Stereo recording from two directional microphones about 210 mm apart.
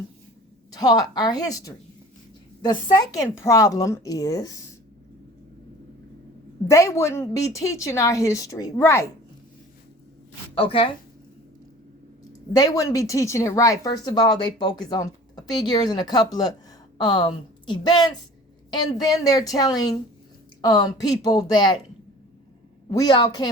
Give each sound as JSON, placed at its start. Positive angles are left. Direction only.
{"t": 0.7, "sound": "a woman's voice", "side_deg": 20}
{"t": 6.7, "sound": "a woman's voice", "side_deg": 15}
{"t": 10.5, "sound": "speech", "side_deg": 25}
{"t": 12.5, "sound": "a woman's voice", "side_deg": 15}
{"t": 22.9, "sound": "speech", "side_deg": 20}